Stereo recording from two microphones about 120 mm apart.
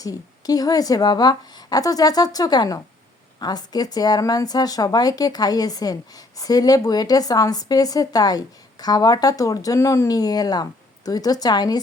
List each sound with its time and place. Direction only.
0.0 s speech: 30° left (ahead or behind)